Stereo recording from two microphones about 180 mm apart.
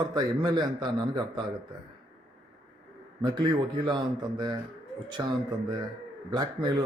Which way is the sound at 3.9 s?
25° right (ahead or behind).